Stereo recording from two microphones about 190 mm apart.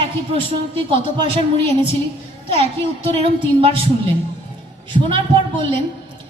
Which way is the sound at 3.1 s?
30° right (ahead or behind).